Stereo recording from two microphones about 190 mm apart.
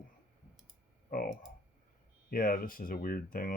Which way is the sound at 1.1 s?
50° left (ahead or behind).